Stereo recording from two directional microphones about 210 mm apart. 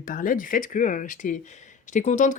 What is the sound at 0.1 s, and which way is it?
Speech, 40° left (ahead or behind).